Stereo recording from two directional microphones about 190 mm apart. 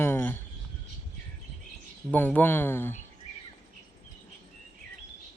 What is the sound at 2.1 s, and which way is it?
Speech, 10° left (ahead or behind).